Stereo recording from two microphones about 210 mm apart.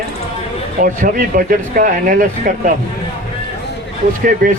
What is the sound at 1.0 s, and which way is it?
Speech, 40° right (ahead or behind).